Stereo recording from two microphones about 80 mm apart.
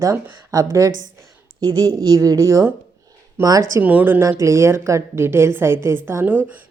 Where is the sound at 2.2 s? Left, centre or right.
Right.